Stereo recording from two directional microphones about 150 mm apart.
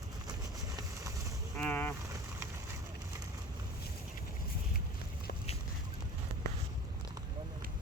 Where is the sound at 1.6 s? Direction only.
10° left (ahead or behind).